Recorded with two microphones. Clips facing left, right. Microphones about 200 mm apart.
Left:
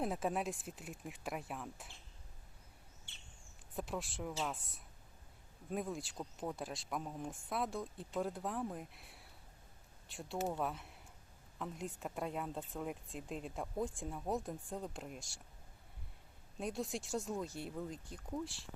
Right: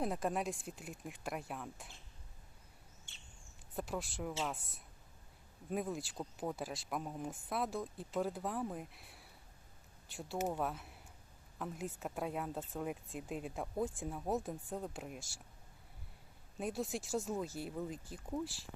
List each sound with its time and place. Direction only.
0.0 s speech: centre (ahead or behind)
3.1 s a sound: 45° right (ahead or behind)
3.8 s speech: centre (ahead or behind)
5.7 s speech: centre (ahead or behind)
16.6 s speech: centre (ahead or behind)